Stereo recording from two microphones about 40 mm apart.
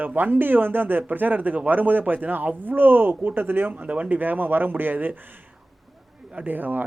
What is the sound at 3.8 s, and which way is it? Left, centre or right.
Speech, right.